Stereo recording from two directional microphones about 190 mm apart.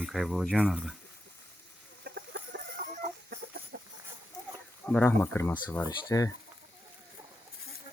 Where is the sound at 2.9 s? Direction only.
45° right (ahead or behind).